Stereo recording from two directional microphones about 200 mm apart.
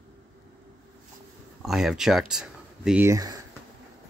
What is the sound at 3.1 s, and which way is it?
Speech, 20° right (ahead or behind).